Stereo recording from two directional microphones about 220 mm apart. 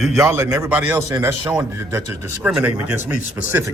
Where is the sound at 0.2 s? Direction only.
10° right (ahead or behind).